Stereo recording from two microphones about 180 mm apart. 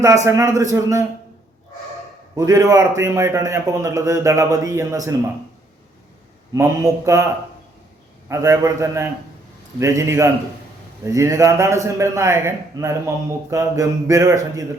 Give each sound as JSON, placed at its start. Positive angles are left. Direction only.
{"t": 0.3, "sound": "a man's voice", "side_deg": -15}
{"t": 2.3, "sound": "a man's voice", "side_deg": -20}
{"t": 6.5, "sound": "a man's voice", "side_deg": -15}
{"t": 8.3, "sound": "a man's voice", "side_deg": -15}